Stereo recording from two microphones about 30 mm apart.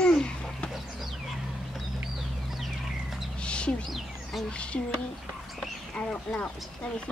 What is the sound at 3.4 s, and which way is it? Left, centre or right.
Bird, left.